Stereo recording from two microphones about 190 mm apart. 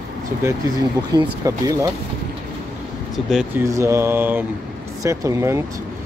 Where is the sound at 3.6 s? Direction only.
15° right (ahead or behind).